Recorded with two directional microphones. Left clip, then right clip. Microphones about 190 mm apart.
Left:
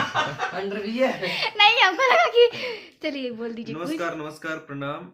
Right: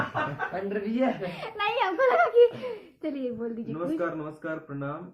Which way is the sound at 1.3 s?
15° left (ahead or behind).